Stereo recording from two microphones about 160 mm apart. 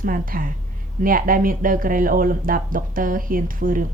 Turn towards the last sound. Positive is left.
turn(degrees=-60)  # may be behind; listen again after turning